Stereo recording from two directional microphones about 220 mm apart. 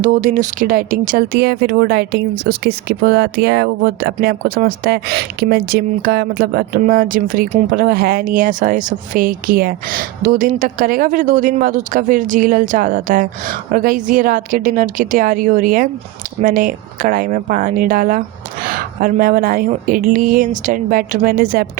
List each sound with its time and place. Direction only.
0.0 s speech: 35° right (ahead or behind)